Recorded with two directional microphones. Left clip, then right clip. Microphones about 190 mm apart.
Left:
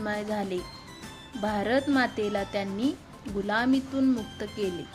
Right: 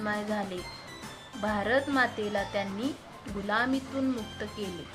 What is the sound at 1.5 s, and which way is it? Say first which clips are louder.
Speech: left 1 dB; 50° left (ahead or behind).